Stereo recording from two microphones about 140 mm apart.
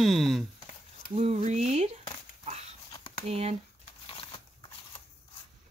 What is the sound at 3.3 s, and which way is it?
Speech, 50° right (ahead or behind).